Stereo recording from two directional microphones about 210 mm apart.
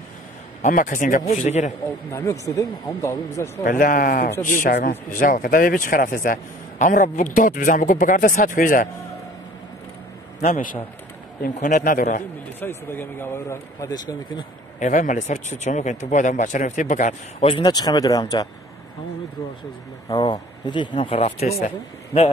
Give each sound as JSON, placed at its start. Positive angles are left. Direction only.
{"t": 0.6, "sound": "speech", "side_deg": 40}
{"t": 2.0, "sound": "speech", "side_deg": 15}
{"t": 3.6, "sound": "speech", "side_deg": 40}
{"t": 10.5, "sound": "speech", "side_deg": 40}
{"t": 12.5, "sound": "speech", "side_deg": 10}
{"t": 14.8, "sound": "speech", "side_deg": 35}
{"t": 20.1, "sound": "speech", "side_deg": 20}